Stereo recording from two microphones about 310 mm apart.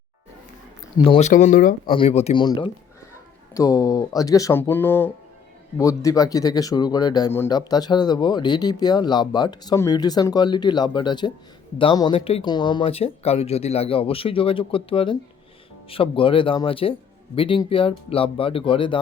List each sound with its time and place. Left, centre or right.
0.9 s speech: centre